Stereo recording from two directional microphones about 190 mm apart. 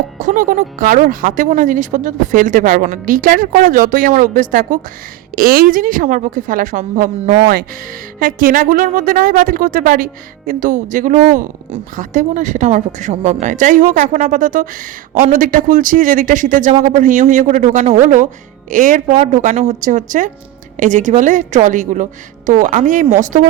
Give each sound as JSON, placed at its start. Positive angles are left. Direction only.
{"t": 0.2, "sound": "a woman's voice", "side_deg": -45}